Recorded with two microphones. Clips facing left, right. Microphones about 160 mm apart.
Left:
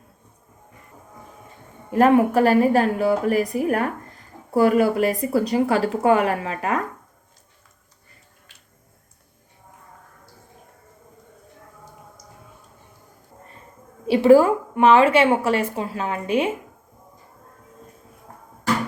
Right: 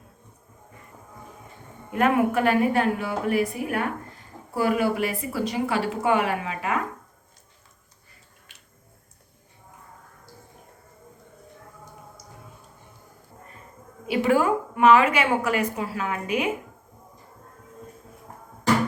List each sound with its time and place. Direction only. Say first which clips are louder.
1.9 s a woman's voice: left 5 dB; 35° left (ahead or behind)
14.1 s a woman's voice: left 7 dB; 30° left (ahead or behind)